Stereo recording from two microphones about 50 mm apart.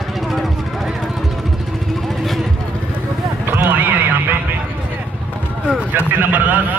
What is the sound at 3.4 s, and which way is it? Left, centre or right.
Horse, right.